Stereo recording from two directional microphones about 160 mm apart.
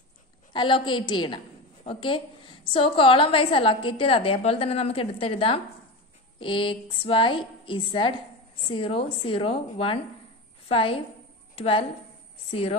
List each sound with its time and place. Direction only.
0.5 s a woman's voice: 30° left (ahead or behind)